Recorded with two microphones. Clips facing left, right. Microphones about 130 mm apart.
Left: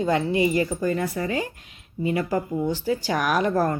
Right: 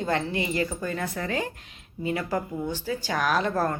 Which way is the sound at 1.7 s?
45° left (ahead or behind).